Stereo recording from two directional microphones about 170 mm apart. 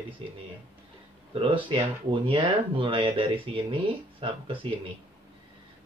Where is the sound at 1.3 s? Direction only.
30° right (ahead or behind).